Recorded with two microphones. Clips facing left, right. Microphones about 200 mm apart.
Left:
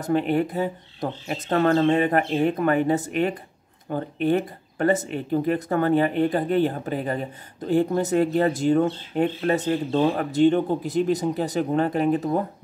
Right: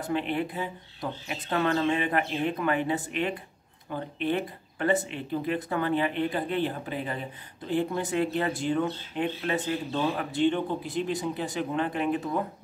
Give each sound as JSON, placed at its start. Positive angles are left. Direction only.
{"t": 0.0, "sound": "speech", "side_deg": 45}